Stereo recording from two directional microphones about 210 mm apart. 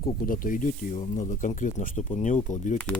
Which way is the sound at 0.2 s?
40° left (ahead or behind).